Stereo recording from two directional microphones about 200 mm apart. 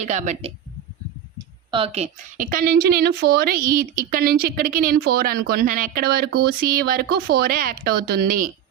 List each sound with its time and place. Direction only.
0.0 s speech: 35° right (ahead or behind)
1.7 s a woman's voice: 30° right (ahead or behind)